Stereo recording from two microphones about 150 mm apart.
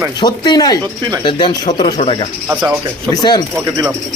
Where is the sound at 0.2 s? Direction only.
30° left (ahead or behind).